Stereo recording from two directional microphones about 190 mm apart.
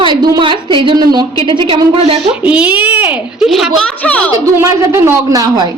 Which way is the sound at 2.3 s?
5° right (ahead or behind).